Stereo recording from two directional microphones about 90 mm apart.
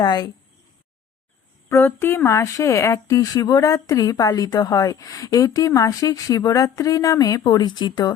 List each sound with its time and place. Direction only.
0.0 s speech: 50° left (ahead or behind)
1.7 s speech: 25° left (ahead or behind); by 8.1 s 50° left (ahead or behind)